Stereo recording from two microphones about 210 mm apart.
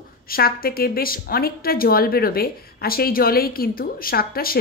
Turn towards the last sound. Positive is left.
turn(degrees=45)  # may be behind; listen again after turning